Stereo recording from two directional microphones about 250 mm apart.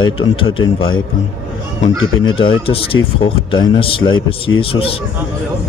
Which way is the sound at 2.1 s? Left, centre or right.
Left.